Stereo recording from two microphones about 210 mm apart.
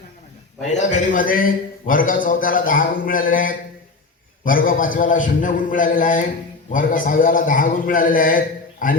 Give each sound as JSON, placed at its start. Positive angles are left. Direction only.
{"t": 0.6, "sound": "a man's voice", "side_deg": 35}